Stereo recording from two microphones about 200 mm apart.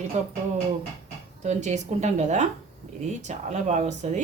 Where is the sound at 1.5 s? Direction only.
35° right (ahead or behind).